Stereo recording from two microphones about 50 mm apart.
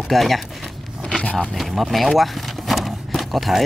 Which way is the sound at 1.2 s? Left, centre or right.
Left.